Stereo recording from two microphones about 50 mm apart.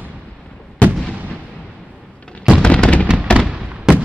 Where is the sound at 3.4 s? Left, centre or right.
Centre.